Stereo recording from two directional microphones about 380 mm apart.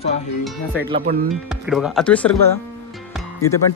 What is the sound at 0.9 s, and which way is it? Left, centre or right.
Speech, right.